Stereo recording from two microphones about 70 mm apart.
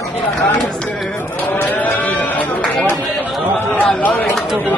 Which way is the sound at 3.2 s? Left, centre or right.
Left.